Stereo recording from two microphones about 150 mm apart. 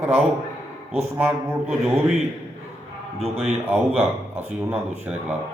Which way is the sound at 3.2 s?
45° right (ahead or behind).